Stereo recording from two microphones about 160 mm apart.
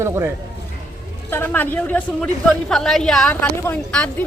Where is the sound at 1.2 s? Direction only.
15° left (ahead or behind).